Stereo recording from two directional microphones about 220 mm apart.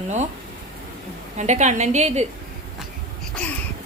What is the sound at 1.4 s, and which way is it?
Speech, 30° right (ahead or behind).